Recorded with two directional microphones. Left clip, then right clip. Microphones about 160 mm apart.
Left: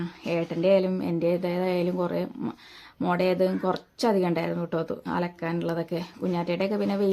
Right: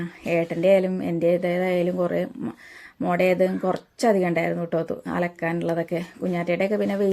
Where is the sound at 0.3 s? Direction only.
10° right (ahead or behind).